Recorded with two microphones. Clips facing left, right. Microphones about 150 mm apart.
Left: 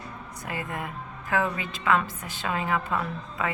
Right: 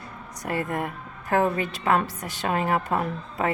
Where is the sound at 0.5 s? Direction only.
45° right (ahead or behind).